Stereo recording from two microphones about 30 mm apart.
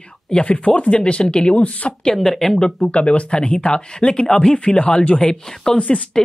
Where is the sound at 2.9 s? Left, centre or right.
Left.